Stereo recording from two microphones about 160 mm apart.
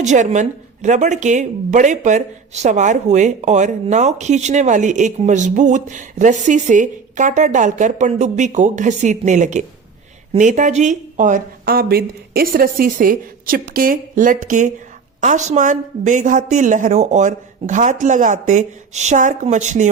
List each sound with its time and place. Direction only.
0.0 s speech: 50° right (ahead or behind)